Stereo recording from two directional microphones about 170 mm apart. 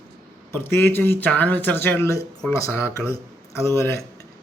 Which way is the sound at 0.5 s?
15° left (ahead or behind).